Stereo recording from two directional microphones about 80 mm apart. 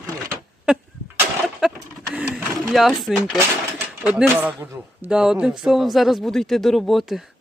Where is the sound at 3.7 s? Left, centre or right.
Centre.